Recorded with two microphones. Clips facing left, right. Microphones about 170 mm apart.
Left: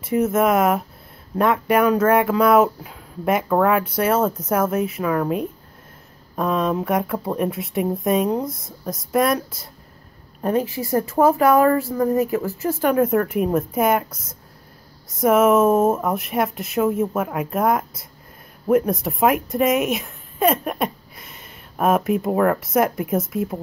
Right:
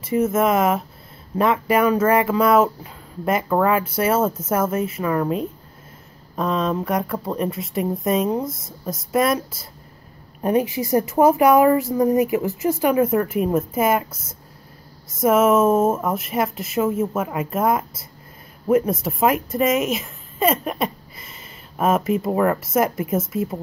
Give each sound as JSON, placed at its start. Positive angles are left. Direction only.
{"t": 0.0, "sound": "speech", "side_deg": 0}
{"t": 10.4, "sound": "speech", "side_deg": -15}
{"t": 12.9, "sound": "speech", "side_deg": -5}